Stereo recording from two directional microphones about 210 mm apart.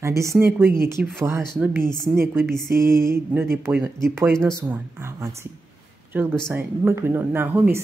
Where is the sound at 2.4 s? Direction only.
Centre (ahead or behind).